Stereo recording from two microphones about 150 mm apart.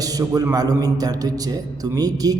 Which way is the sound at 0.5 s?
25° right (ahead or behind).